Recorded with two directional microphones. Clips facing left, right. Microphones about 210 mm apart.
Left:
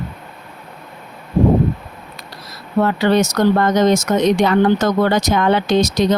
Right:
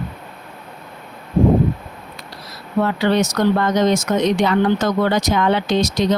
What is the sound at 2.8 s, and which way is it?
Speech, 45° left (ahead or behind).